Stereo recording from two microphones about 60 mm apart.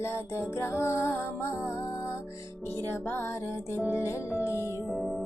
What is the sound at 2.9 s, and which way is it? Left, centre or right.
Music, left.